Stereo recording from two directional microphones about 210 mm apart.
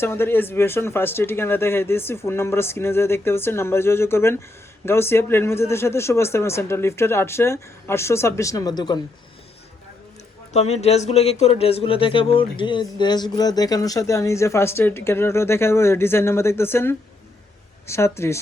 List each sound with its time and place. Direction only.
0.0 s speech: 10° left (ahead or behind)
10.5 s speech: 30° left (ahead or behind); by 18.3 s 15° left (ahead or behind)